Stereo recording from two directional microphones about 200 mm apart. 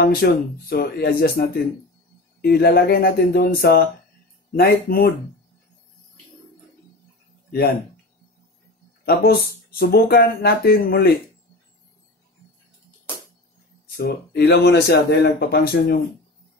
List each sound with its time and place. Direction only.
0.0 s speech: 50° left (ahead or behind)
9.0 s speech: 50° left (ahead or behind)
13.9 s speech: 55° left (ahead or behind)